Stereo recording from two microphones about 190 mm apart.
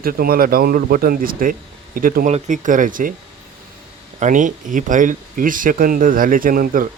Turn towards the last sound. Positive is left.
turn(degrees=-45)  # may be behind; listen again after turning